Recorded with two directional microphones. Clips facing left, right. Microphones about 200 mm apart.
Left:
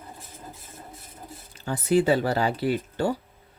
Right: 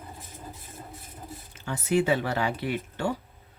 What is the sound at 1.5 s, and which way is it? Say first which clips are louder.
Speech: left 3 dB; 35° left (ahead or behind).